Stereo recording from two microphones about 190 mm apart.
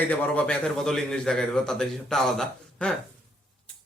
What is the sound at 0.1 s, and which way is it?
A man's voice, 5° left (ahead or behind).